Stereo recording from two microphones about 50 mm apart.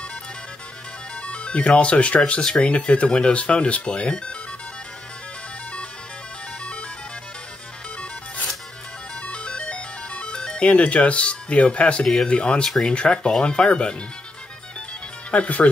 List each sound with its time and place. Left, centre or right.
1.2 s speech: left
9.2 s music: left
12.3 s speech: left
12.6 s speech: centre
12.9 s speech: left
15.3 s speech: left